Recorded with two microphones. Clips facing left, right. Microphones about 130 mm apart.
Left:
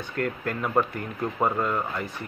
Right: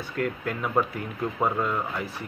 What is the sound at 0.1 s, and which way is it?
Speech, centre (ahead or behind).